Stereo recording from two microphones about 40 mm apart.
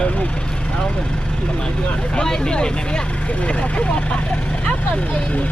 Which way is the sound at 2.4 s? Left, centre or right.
Left.